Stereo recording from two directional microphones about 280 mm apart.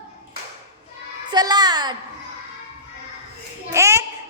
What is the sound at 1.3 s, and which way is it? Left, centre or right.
Child singing, centre.